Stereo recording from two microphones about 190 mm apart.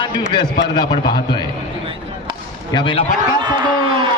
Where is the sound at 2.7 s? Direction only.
25° left (ahead or behind).